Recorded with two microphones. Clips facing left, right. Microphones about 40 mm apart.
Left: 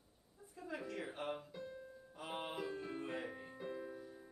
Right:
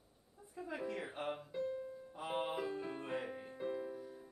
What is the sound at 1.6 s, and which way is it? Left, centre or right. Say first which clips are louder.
Music: right 9 dB; right.